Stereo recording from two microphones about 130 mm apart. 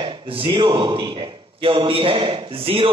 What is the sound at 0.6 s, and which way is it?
A man's voice, 35° right (ahead or behind).